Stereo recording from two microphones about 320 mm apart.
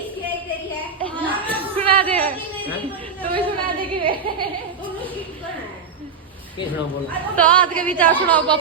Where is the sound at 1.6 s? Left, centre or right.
Centre.